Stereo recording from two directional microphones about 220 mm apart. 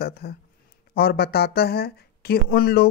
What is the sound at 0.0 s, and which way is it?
Speech, 45° left (ahead or behind).